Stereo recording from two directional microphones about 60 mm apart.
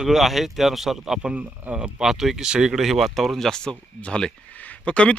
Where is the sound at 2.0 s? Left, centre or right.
Centre.